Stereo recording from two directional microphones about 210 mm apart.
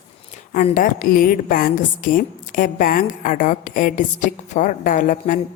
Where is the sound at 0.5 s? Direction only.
40° left (ahead or behind).